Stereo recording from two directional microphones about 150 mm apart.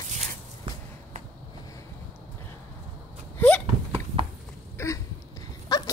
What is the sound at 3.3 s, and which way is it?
Hiccup, 5° left (ahead or behind).